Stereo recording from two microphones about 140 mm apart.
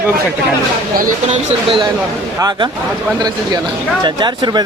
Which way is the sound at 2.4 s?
30° right (ahead or behind).